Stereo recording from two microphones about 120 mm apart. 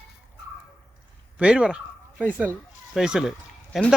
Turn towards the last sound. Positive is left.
turn(degrees=-5)  # may be behind; listen again after turning